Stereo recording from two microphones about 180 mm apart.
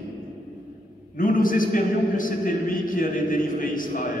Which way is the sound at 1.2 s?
50° left (ahead or behind).